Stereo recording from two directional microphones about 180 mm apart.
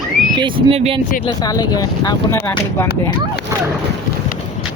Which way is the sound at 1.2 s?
20° left (ahead or behind).